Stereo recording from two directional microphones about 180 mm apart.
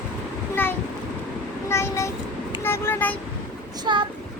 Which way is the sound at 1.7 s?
15° left (ahead or behind).